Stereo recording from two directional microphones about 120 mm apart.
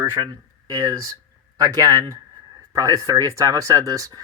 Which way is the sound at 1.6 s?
30° right (ahead or behind).